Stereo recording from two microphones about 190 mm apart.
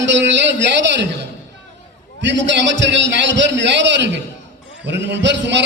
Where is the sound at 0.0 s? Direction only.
70° right (ahead or behind).